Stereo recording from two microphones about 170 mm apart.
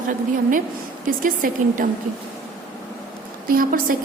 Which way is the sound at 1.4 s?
55° right (ahead or behind).